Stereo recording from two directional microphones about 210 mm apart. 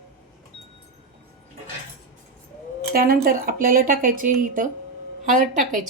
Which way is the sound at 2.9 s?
45° right (ahead or behind).